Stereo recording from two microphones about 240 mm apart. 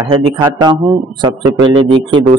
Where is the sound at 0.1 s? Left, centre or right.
Centre.